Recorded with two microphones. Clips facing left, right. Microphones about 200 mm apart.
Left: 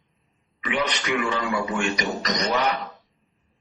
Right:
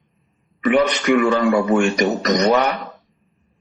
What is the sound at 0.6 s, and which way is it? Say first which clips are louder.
A man's voice: right 10 dB; 50° right (ahead or behind).